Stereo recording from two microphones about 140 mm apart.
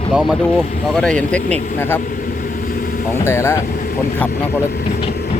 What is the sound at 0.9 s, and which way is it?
Speech, 5° left (ahead or behind).